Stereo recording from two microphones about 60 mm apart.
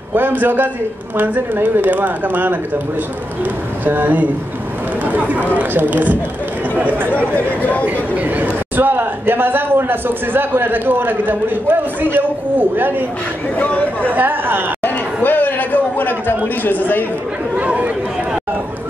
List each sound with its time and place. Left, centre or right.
0.1 s a woman's voice: right
3.8 s speech: right
7.3 s speech: left
7.8 s a woman's voice: right
13.6 s speech: left
14.1 s a woman's voice: right
15.2 s a sound: left
16.6 s a man's voice: left
17.6 s chatter: right